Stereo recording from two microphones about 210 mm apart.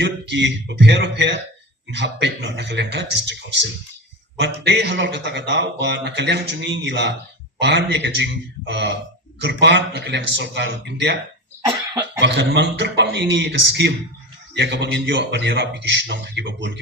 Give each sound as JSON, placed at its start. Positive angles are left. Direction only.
{"t": 0.0, "sound": "a man's voice", "side_deg": -55}
{"t": 12.2, "sound": "a man's voice", "side_deg": -55}